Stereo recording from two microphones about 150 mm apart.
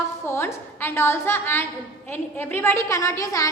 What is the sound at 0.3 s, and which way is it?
A woman's voice, 15° left (ahead or behind).